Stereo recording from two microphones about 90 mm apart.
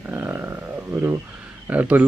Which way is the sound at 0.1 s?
25° right (ahead or behind).